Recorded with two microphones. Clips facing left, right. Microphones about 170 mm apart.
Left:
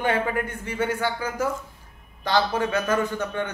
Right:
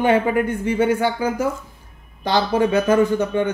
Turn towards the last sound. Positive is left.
turn(degrees=-10)  # may be behind; listen again after turning